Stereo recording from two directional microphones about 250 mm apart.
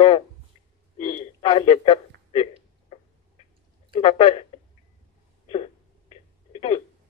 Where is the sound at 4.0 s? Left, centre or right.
Left.